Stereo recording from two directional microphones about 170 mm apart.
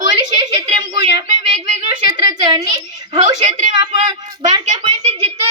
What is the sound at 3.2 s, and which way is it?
Speech, 45° right (ahead or behind).